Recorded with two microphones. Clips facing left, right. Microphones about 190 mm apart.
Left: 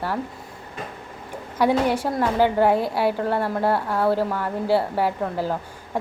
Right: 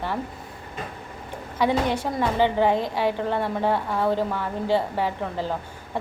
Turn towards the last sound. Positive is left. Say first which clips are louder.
# left 3 dB
turn(degrees=10)  # may be behind; listen again after turning